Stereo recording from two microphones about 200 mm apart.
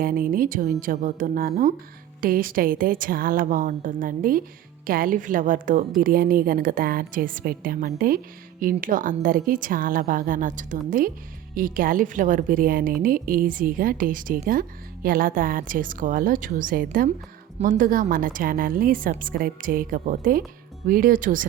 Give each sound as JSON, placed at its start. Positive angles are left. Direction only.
{"t": 0.0, "sound": "a woman's voice", "side_deg": -45}